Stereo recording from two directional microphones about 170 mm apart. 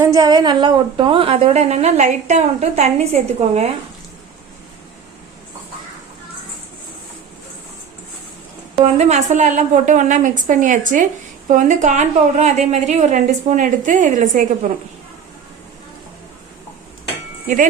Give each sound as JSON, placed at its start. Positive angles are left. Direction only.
{"t": 0.0, "sound": "a woman's voice", "side_deg": -20}
{"t": 8.7, "sound": "a woman's voice", "side_deg": -40}